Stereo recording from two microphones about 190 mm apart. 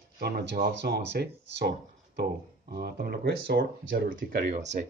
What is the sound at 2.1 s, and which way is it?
Speech, 55° right (ahead or behind).